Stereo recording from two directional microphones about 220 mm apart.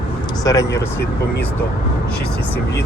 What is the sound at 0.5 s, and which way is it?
Speech, 15° left (ahead or behind).